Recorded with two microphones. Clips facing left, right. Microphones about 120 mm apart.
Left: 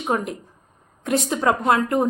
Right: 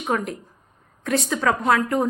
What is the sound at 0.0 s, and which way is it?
Speech, 15° left (ahead or behind).